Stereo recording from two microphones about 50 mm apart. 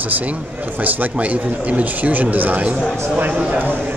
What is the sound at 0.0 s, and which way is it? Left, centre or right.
Speech, right.